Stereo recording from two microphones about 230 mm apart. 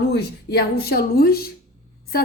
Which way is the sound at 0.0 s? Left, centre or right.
Left.